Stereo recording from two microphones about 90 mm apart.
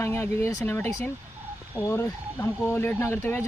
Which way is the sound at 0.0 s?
25° left (ahead or behind).